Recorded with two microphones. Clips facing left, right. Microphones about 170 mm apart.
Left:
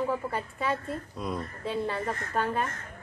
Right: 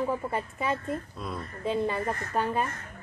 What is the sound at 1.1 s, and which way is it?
Speech, 15° left (ahead or behind).